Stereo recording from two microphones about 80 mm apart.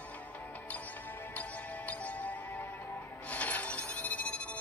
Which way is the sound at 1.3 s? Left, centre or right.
Centre.